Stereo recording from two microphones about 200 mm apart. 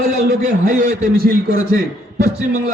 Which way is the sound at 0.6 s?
45° right (ahead or behind).